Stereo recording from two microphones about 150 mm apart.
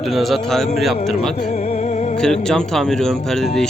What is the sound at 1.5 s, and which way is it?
Music, 45° left (ahead or behind).